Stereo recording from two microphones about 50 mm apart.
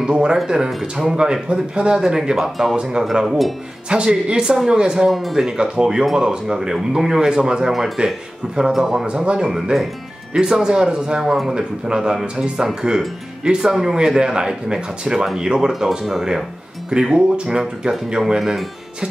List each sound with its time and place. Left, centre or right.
0.0 s speech: centre
0.7 s speech: centre
1.0 s speech: centre
3.9 s speech: centre
16.9 s speech: centre
18.4 s speech: centre